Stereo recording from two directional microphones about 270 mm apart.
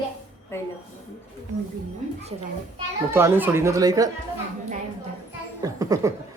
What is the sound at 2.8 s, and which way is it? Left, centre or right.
Speech, centre.